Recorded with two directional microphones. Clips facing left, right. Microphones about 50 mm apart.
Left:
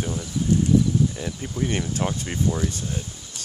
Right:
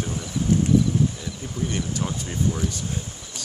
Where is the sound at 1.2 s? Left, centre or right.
Left.